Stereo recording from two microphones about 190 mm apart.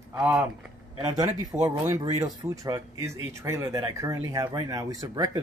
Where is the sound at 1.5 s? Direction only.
20° right (ahead or behind).